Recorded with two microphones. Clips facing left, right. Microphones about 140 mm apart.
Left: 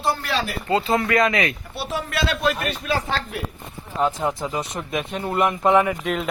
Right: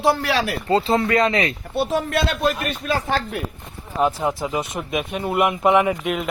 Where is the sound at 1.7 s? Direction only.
50° right (ahead or behind).